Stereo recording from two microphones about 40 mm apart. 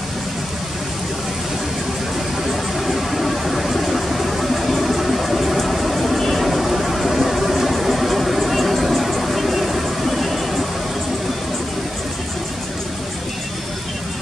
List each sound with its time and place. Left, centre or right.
2.9 s vehicle: centre